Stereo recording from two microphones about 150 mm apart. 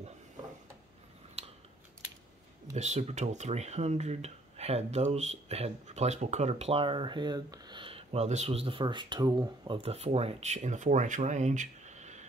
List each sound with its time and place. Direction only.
2.7 s speech: 50° right (ahead or behind)